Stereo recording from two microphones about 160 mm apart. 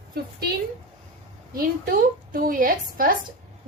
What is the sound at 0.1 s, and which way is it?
Speech, 80° right.